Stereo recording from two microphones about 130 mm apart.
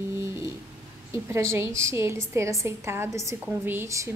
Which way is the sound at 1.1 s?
20° right (ahead or behind).